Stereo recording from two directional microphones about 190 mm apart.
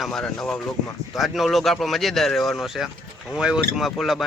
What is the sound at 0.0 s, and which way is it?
Speech, centre (ahead or behind).